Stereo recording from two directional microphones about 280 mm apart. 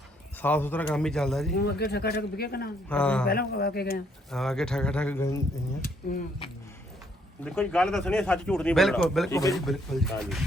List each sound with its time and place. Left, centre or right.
0.4 s speech: centre
1.5 s speech: left
2.9 s speech: centre
3.2 s speech: left
4.3 s speech: centre
7.4 s speech: centre
9.3 s speech: centre
9.6 s speech: centre